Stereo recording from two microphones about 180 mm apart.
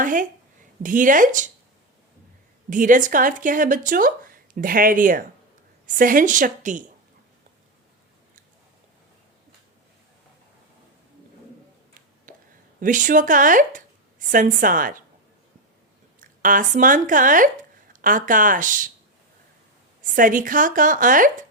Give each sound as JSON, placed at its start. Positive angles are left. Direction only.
{"t": 0.0, "sound": "speech", "side_deg": -50}
{"t": 2.6, "sound": "speech", "side_deg": -45}
{"t": 12.3, "sound": "a sound", "side_deg": -50}
{"t": 12.8, "sound": "a woman's voice", "side_deg": -45}
{"t": 16.4, "sound": "speech", "side_deg": -45}
{"t": 20.0, "sound": "speech", "side_deg": -50}